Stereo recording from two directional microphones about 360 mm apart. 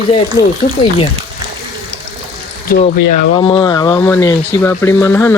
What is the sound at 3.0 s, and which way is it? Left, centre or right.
Speech, left.